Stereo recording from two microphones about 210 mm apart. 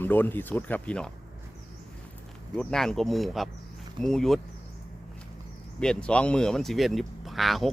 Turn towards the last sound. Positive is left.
turn(degrees=0)  # may be behind; listen again after turning